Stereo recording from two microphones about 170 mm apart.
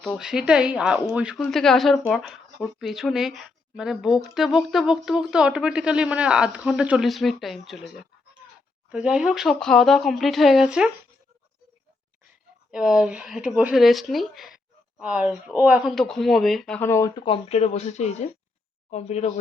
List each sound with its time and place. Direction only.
0.0 s speech: centre (ahead or behind)
12.7 s speech: 5° right (ahead or behind); by 17.2 s 15° left (ahead or behind)
17.2 s speech: 35° left (ahead or behind)